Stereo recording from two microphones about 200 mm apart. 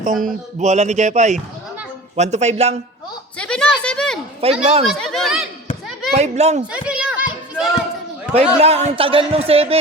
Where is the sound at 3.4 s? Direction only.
5° left (ahead or behind).